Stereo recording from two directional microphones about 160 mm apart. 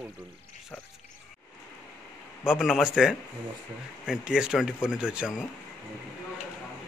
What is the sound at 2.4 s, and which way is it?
Speech, 5° right (ahead or behind).